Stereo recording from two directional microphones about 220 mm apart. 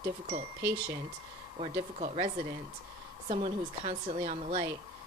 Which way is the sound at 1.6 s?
30° right (ahead or behind).